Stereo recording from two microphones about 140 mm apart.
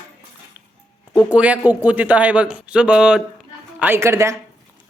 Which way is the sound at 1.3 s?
10° right (ahead or behind).